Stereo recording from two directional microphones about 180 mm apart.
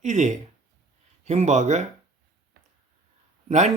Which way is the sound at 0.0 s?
40° right (ahead or behind).